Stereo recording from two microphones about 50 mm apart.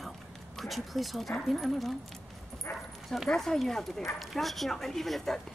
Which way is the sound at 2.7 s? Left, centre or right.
Left.